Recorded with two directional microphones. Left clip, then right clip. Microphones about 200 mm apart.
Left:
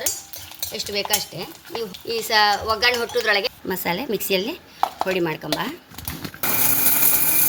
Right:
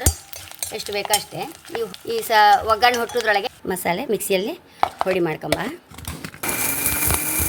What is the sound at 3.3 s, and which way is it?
Chopping, 30° right (ahead or behind).